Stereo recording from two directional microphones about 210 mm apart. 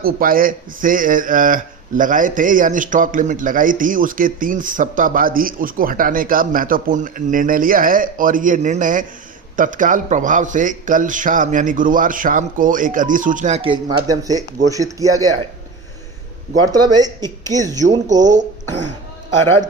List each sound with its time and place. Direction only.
0.0 s speech: 45° right (ahead or behind); by 15.3 s 15° right (ahead or behind)
16.7 s speech: 20° right (ahead or behind)
17.8 s speech: 35° right (ahead or behind)